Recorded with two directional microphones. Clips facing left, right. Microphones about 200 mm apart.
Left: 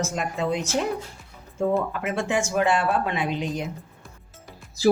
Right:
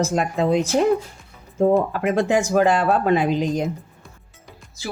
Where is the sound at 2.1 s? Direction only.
35° right (ahead or behind).